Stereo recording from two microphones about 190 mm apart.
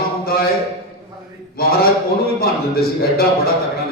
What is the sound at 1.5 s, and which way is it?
A man's voice, 55° left (ahead or behind).